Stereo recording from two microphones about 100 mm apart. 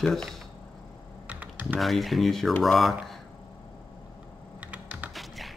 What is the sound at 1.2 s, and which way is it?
Computer keyboard, 15° right (ahead or behind).